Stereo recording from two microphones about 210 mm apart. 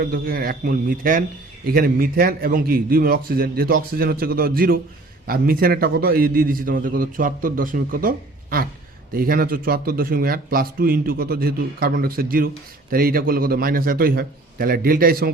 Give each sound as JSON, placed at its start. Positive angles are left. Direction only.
{"t": 0.0, "sound": "a man's voice", "side_deg": -45}